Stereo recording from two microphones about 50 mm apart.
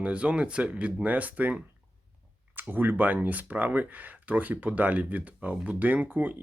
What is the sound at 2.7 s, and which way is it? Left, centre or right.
Speech, right.